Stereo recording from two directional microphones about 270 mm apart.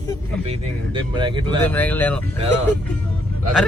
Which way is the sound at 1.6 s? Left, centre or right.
Centre.